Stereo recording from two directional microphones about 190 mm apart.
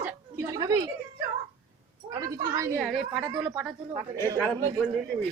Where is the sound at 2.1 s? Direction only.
20° right (ahead or behind).